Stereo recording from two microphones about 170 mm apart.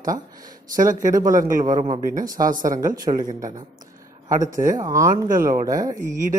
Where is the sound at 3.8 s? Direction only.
50° right (ahead or behind).